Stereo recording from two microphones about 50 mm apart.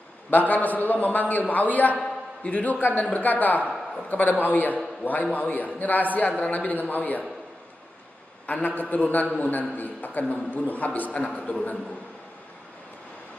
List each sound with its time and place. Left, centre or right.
0.3 s a man's voice: left
8.5 s a man's voice: left